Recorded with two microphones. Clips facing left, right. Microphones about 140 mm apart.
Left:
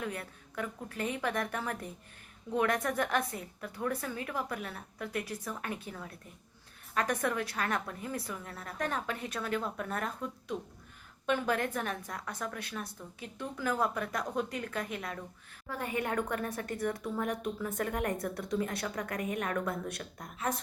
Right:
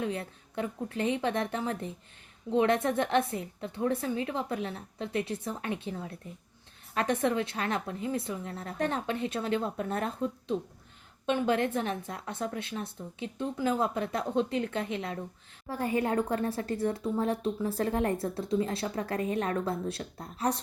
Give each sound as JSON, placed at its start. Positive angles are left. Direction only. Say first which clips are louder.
{"t": 0.0, "sound": "speech", "louder": "right 5 dB", "side_deg": -25}